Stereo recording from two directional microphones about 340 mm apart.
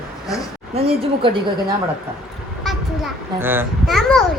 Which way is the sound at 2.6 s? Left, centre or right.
Centre.